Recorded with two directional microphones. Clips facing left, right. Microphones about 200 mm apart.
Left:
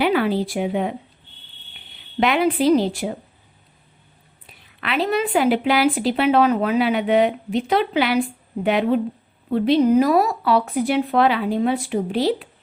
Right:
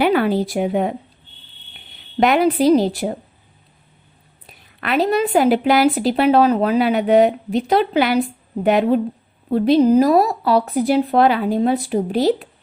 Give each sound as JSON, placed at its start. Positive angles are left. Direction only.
{"t": 0.0, "sound": "speech", "side_deg": -45}
{"t": 2.2, "sound": "a woman's voice", "side_deg": -45}
{"t": 4.4, "sound": "a woman's voice", "side_deg": -45}